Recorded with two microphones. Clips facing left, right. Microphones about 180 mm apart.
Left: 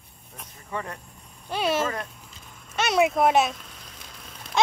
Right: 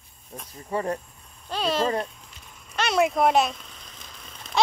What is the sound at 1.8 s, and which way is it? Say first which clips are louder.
Speech: right 3 dB; 30° right (ahead or behind).